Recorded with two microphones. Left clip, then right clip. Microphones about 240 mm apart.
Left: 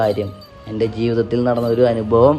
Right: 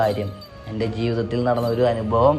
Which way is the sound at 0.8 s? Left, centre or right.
Left.